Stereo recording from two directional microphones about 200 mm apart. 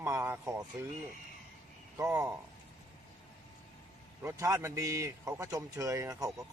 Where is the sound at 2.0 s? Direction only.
15° right (ahead or behind).